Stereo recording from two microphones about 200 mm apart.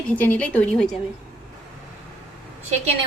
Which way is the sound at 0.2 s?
10° left (ahead or behind).